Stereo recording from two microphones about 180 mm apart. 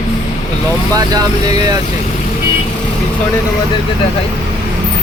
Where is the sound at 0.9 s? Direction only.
20° right (ahead or behind).